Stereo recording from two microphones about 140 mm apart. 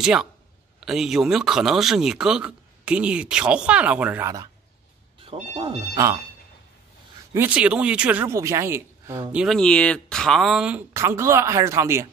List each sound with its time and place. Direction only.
0.0 s a man's voice: 5° right (ahead or behind)
5.2 s speech: 40° right (ahead or behind)
7.3 s speech: 10° right (ahead or behind)
9.3 s speech: 5° right (ahead or behind)
9.6 s speech: 5° left (ahead or behind)
11.0 s speech: 20° right (ahead or behind)